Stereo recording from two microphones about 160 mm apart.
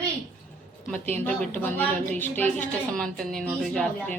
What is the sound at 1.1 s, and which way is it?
A woman's voice, 10° left (ahead or behind).